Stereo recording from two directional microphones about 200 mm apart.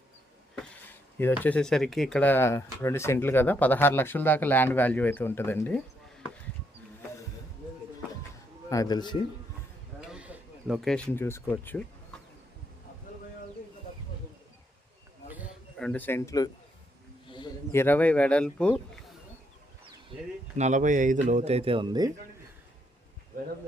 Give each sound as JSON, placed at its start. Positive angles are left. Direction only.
{"t": 1.4, "sound": "speech", "side_deg": 5}
{"t": 8.7, "sound": "speech", "side_deg": 20}
{"t": 10.1, "sound": "speech", "side_deg": -5}
{"t": 15.8, "sound": "speech", "side_deg": 5}
{"t": 20.6, "sound": "speech", "side_deg": -35}